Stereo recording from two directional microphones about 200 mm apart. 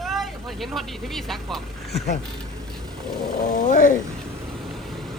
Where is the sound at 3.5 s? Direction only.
40° left (ahead or behind).